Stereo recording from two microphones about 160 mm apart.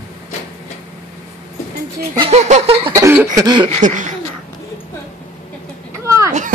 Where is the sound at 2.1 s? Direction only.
40° right (ahead or behind).